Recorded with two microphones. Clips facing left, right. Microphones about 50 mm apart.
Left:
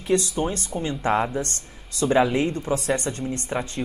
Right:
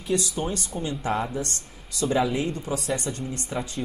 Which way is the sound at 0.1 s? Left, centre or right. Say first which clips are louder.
Left 4 dB; left.